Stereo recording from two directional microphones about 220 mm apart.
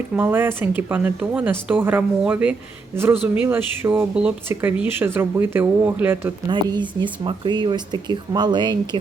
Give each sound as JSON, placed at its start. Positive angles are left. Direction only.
{"t": 0.2, "sound": "speech", "side_deg": -10}
{"t": 6.5, "sound": "speech", "side_deg": -20}